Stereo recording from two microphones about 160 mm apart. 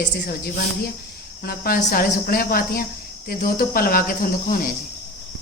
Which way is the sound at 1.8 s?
60° left (ahead or behind).